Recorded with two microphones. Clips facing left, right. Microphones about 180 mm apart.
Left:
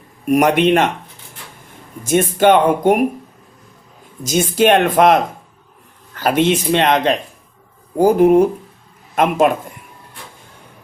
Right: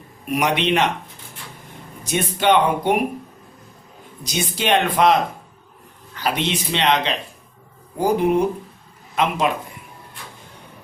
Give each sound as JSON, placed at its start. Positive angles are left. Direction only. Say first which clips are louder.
{"t": 0.3, "sound": "speech", "louder": "left 7 dB", "side_deg": 50}
{"t": 2.0, "sound": "speech", "louder": "left 6 dB", "side_deg": 50}
{"t": 4.2, "sound": "speech", "louder": "left 10 dB", "side_deg": 45}
{"t": 6.1, "sound": "speech", "louder": "left 8 dB", "side_deg": 50}